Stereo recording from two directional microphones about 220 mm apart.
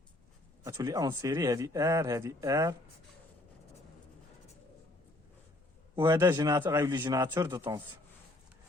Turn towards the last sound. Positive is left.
turn(degrees=-15)  # may be behind; listen again after turning